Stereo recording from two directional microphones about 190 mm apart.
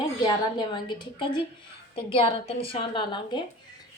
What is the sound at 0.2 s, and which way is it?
A woman's voice, 25° left (ahead or behind).